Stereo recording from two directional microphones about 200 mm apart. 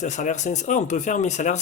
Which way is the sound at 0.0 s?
35° left (ahead or behind).